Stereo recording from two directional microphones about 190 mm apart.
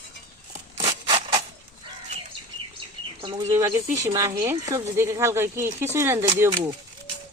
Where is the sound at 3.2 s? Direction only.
25° right (ahead or behind).